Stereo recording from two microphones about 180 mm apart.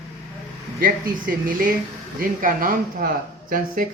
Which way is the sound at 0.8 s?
50° right (ahead or behind).